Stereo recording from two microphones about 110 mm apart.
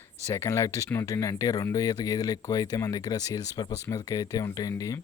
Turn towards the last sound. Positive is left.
turn(degrees=35)  # may be behind; listen again after turning